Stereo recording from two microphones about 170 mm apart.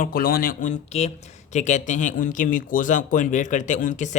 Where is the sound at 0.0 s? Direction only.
60° left (ahead or behind).